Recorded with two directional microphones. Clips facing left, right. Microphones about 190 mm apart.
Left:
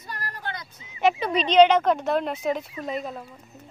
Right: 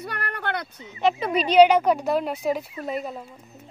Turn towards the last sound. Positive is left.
turn(degrees=-5)  # may be behind; listen again after turning